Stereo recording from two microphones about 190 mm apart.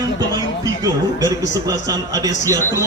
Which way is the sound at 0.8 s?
20° right (ahead or behind).